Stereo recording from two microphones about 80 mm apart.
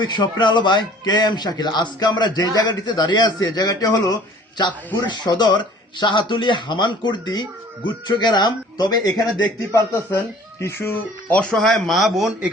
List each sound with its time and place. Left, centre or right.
0.0 s a man's voice: left
6.0 s a man's voice: left
9.7 s speech: left
11.5 s speech: centre